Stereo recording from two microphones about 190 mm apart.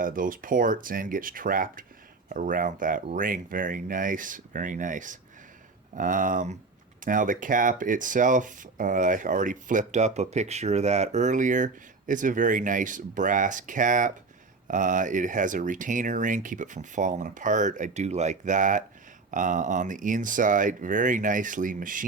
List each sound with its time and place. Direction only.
0.0 s speech: 45° right (ahead or behind)